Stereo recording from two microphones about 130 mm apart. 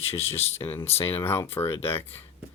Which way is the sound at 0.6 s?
15° left (ahead or behind).